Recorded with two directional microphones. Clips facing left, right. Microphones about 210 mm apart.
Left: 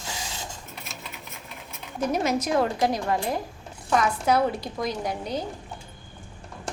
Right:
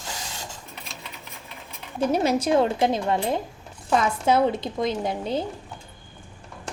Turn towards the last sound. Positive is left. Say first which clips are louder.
# right 3 dB
turn(degrees=-25)  # may be behind; listen again after turning